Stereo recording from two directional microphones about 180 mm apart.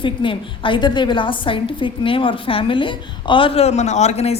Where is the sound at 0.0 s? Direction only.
30° left (ahead or behind).